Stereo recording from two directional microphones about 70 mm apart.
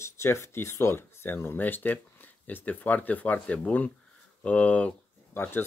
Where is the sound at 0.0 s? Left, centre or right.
Left.